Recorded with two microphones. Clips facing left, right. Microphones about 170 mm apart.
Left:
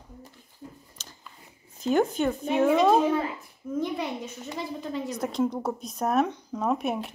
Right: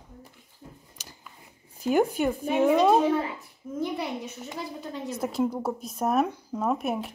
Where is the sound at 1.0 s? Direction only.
15° right (ahead or behind).